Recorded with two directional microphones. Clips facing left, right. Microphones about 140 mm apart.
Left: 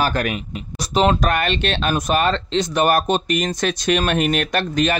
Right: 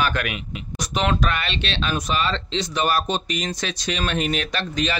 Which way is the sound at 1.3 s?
50° left (ahead or behind).